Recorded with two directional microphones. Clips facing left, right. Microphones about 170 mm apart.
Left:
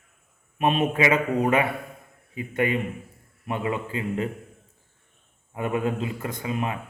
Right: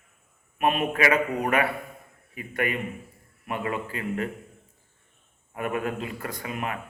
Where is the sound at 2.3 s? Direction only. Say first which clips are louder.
Left 4 dB; 25° left (ahead or behind).